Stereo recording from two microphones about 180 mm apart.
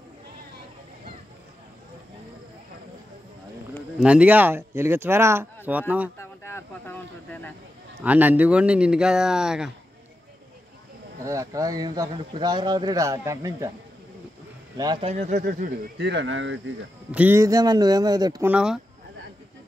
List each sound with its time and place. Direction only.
4.0 s speech: 5° right (ahead or behind)
6.1 s speech: 15° left (ahead or behind)
8.0 s speech: 10° right (ahead or behind)
11.2 s speech: 20° right (ahead or behind)
14.8 s speech: 25° right (ahead or behind)
16.0 s speech: 75° right (ahead or behind); by 16.7 s 90° right
17.1 s speech: 10° right (ahead or behind)
18.5 s speech: 5° right (ahead or behind)